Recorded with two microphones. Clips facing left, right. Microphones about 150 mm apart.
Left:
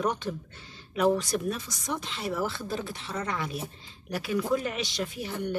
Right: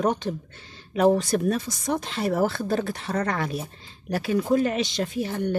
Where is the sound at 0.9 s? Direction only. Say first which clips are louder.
Right 5 dB; 40° right (ahead or behind); by 3.5 s 60° right (ahead or behind).